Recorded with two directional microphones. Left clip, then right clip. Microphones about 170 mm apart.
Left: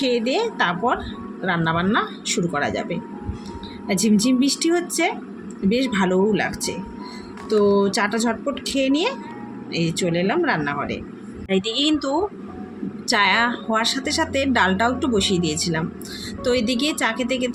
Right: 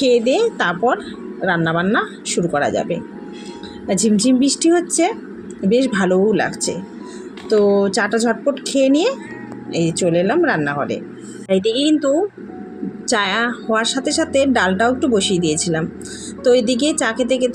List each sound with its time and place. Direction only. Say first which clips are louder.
0.0 s speech: right 6 dB; 15° right (ahead or behind)